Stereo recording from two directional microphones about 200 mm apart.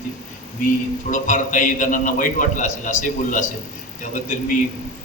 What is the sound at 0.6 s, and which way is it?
A man's voice, 40° left (ahead or behind).